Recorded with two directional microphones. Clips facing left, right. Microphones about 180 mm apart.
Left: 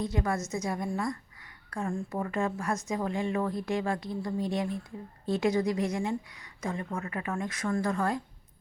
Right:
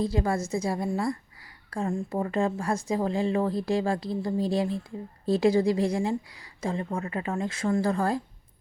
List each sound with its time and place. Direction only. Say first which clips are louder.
0.0 s a woman's voice: right 4 dB; 30° right (ahead or behind)